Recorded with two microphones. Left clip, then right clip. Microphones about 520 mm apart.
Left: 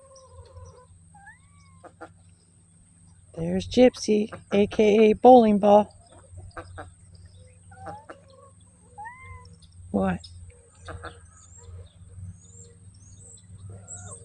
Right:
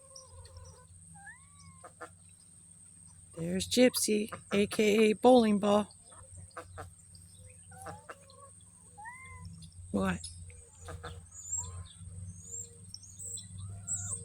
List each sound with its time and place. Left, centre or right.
1.5 s cat: right
3.3 s speech: right
6.5 s chicken: right
7.9 s chicken: right
9.2 s cat: right
10.9 s vehicle: right